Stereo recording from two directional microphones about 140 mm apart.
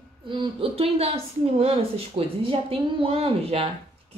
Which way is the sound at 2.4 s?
40° right (ahead or behind).